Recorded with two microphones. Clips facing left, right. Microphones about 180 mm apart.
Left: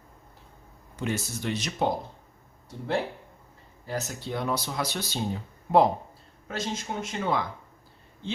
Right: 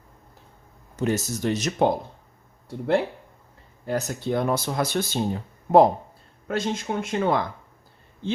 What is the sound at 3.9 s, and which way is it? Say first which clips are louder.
Speech: right 7 dB; 55° right (ahead or behind).